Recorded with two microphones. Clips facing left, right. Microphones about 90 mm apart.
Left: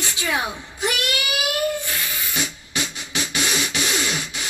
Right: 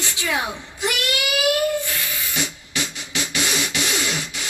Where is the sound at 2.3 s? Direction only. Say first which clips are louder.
Even; 25° left (ahead or behind).